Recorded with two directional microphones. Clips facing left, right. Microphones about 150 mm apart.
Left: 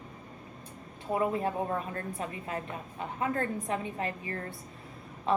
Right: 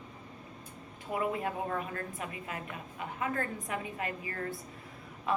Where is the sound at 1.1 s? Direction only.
30° left (ahead or behind).